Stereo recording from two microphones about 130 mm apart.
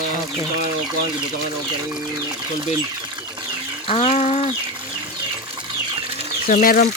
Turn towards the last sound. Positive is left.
turn(degrees=90)